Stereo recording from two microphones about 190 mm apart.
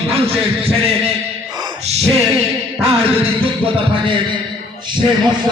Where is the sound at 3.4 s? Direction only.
25° right (ahead or behind).